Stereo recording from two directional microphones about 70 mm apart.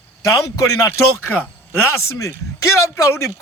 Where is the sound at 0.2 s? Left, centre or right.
Left.